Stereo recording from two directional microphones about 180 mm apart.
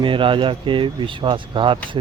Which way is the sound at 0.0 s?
30° right (ahead or behind).